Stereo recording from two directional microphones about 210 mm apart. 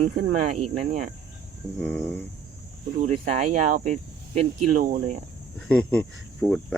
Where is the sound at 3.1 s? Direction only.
35° right (ahead or behind).